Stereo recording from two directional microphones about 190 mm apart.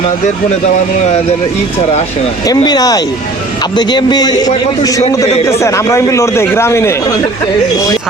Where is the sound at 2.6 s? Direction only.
20° left (ahead or behind).